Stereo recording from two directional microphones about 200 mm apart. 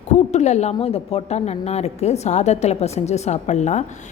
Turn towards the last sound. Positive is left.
turn(degrees=35)  # may be behind; listen again after turning